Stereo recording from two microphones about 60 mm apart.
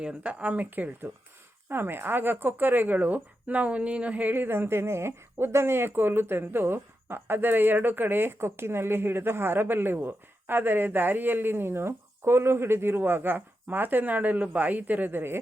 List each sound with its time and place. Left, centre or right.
0.0 s speech: centre
1.7 s speech: right